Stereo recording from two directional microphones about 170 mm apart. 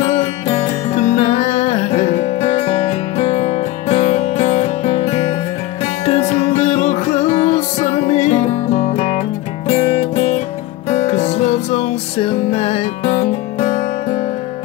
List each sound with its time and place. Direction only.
0.0 s music: 35° left (ahead or behind)